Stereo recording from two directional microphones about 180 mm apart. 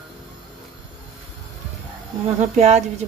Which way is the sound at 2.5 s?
40° right (ahead or behind).